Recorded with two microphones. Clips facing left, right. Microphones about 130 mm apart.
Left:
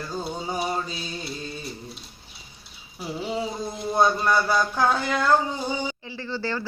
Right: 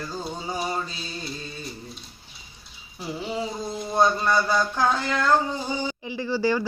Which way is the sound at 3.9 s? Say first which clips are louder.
Even; 5° left (ahead or behind).